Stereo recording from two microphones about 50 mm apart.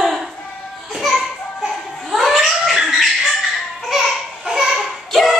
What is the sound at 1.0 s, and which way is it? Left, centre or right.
Children playing, centre.